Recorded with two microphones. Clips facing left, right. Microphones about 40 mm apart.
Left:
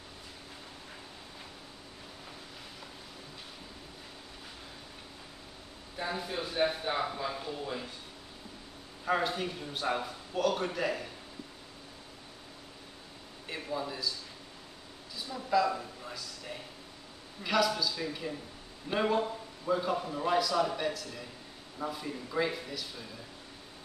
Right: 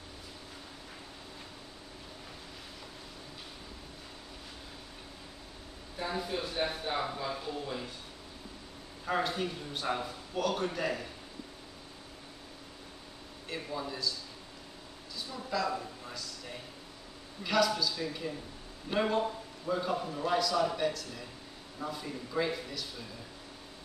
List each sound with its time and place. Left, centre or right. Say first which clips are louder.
5.9 s speech: even; centre
9.0 s a man's voice: left 1 dB; centre
13.5 s speech: left 1 dB; centre
15.1 s a woman's voice: left 6 dB; centre
17.4 s a man's voice: even; centre